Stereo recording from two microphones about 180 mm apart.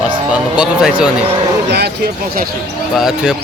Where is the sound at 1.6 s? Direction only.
65° right (ahead or behind).